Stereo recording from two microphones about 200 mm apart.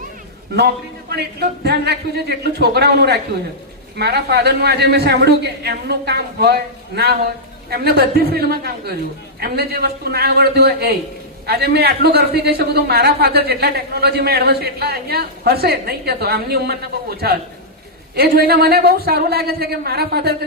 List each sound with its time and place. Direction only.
1.1 s a woman's voice: 55° right (ahead or behind)